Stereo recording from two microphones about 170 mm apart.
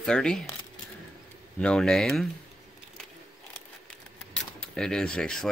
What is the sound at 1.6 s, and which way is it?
Speech, 5° left (ahead or behind).